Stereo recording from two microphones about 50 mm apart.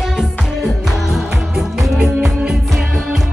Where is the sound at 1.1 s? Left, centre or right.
Centre.